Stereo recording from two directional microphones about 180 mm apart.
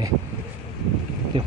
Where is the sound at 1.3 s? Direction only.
25° right (ahead or behind).